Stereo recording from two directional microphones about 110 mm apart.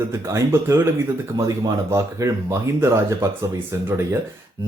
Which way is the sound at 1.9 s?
30° right (ahead or behind).